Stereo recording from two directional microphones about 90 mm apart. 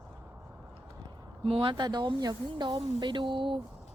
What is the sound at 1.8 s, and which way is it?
Speech, 55° right (ahead or behind).